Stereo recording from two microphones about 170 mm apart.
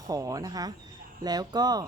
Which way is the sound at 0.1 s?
20° right (ahead or behind).